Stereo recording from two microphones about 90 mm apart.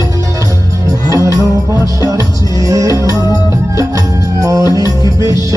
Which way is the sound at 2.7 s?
40° right (ahead or behind).